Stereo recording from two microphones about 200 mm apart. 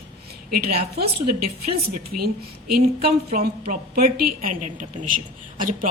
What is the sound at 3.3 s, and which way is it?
Speech, 45° right (ahead or behind).